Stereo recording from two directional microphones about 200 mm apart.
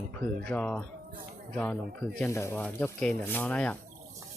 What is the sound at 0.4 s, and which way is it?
Speech, 5° left (ahead or behind).